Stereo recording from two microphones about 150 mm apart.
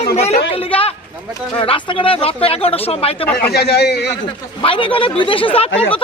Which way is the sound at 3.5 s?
90° left.